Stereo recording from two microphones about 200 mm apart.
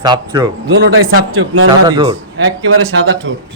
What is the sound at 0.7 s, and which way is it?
Speech, 70° right (ahead or behind).